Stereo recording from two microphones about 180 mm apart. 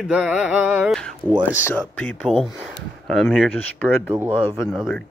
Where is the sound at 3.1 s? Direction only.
Centre (ahead or behind).